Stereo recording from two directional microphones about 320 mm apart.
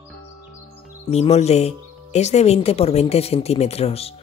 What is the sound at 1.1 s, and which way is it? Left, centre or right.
Speech, centre.